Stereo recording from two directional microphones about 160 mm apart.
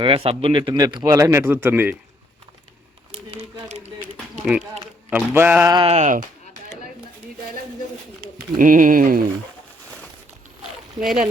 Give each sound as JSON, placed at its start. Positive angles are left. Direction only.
{"t": 0.0, "sound": "a man's voice", "side_deg": -35}
{"t": 3.1, "sound": "a sound", "side_deg": -40}
{"t": 5.1, "sound": "a sound", "side_deg": -10}
{"t": 5.6, "sound": "a man's voice", "side_deg": -30}
{"t": 5.9, "sound": "speech", "side_deg": -50}
{"t": 8.5, "sound": "speech", "side_deg": -55}
{"t": 11.0, "sound": "speech", "side_deg": 0}